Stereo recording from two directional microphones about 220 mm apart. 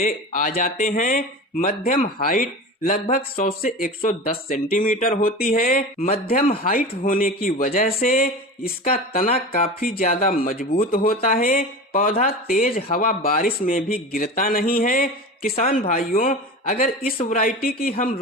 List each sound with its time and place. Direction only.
0.0 s speech: 40° left (ahead or behind)